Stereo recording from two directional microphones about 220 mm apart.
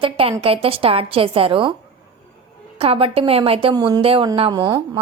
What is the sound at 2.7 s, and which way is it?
A woman's voice, 25° right (ahead or behind).